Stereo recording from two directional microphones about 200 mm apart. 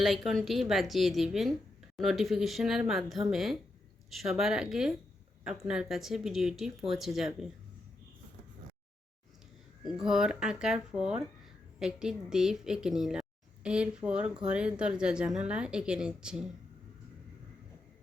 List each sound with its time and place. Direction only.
0.3 s a woman's voice: centre (ahead or behind)
9.8 s a woman's voice: 5° right (ahead or behind)